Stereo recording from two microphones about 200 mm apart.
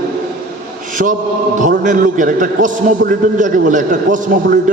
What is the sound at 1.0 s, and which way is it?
Chant, 50° right (ahead or behind).